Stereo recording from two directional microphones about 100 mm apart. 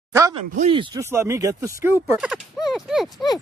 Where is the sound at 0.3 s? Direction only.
60° right (ahead or behind).